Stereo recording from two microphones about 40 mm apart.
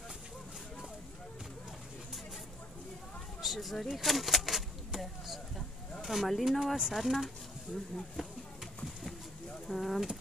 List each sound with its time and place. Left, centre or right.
3.3 s a sound: centre
3.9 s speech: centre
4.9 s a sound: centre
6.0 s speech: centre
8.2 s speech: centre
9.7 s speech: centre